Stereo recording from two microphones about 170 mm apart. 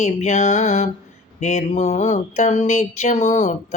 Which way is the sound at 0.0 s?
45° left (ahead or behind).